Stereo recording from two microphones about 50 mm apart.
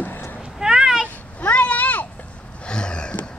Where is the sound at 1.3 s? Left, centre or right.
Left.